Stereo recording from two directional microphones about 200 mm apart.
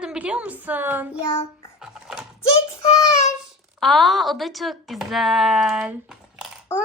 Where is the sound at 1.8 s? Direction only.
5° right (ahead or behind).